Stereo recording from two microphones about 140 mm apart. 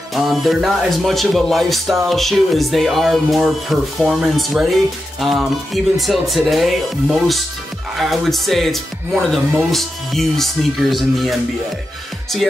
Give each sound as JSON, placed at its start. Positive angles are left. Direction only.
{"t": 0.1, "sound": "speech", "side_deg": 0}